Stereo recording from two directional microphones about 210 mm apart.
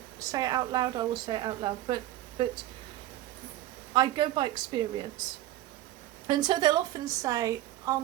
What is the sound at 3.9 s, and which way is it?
Speech, 20° right (ahead or behind).